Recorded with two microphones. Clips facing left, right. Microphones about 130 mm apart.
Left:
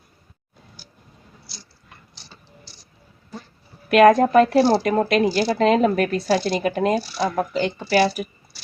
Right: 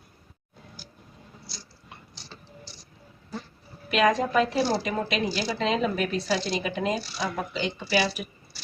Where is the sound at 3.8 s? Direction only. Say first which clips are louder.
Left 10 dB; 55° left (ahead or behind).